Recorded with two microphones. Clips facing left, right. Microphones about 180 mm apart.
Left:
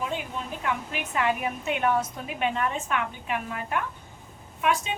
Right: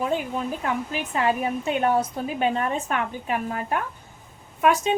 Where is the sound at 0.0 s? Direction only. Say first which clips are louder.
Right 6 dB; 40° right (ahead or behind).